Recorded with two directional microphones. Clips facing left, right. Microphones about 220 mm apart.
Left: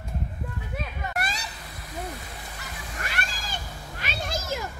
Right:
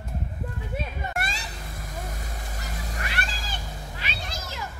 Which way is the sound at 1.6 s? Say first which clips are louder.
Right 3 dB; 45° right (ahead or behind).